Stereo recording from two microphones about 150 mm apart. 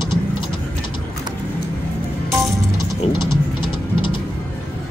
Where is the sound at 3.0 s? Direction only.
35° left (ahead or behind).